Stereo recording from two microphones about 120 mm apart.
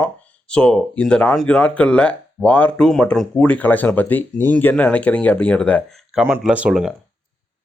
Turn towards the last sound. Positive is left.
turn(degrees=-5)  # may be behind; listen again after turning